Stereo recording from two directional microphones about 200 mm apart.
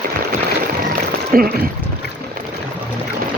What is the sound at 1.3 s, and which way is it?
Speech, 45° right (ahead or behind).